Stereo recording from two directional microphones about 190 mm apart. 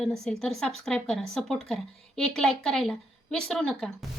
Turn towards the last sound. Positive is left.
turn(degrees=5)  # may be behind; listen again after turning